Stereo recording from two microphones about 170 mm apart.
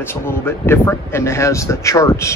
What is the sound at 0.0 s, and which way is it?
Speech, 15° left (ahead or behind).